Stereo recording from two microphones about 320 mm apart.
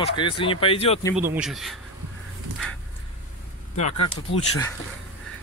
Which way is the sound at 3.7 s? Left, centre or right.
Left.